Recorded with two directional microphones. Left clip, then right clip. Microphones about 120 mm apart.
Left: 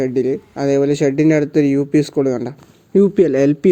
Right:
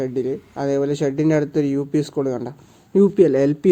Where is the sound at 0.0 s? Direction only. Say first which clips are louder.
Left 6 dB; 40° left (ahead or behind).